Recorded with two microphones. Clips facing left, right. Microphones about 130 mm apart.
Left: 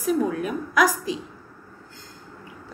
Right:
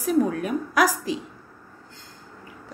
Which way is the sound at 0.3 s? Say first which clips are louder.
Even; 45° right (ahead or behind).